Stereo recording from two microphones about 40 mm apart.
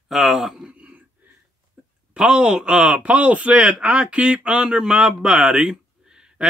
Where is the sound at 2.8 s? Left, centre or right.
Right.